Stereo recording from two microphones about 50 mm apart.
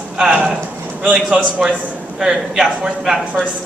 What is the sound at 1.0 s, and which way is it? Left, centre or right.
A man's voice, centre.